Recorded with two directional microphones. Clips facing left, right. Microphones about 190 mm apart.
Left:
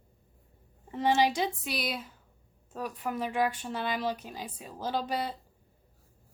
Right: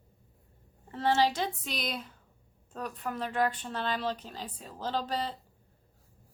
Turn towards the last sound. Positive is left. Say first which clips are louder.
# left 1 dB
turn(degrees=10)  # may be behind; listen again after turning